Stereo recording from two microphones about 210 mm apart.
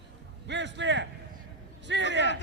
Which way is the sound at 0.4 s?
60° right (ahead or behind).